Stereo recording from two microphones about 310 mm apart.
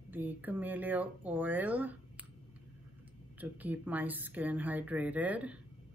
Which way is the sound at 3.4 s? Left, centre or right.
Centre.